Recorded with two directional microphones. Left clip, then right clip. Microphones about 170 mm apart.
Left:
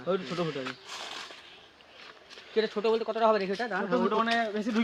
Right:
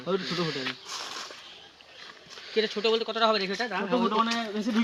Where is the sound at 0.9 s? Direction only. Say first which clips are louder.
Right 3 dB; 25° left (ahead or behind).